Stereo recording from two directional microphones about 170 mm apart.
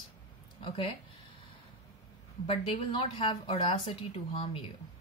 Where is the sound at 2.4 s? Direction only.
30° left (ahead or behind).